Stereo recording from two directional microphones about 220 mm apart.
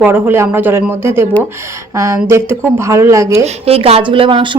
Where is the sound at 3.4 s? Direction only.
30° right (ahead or behind).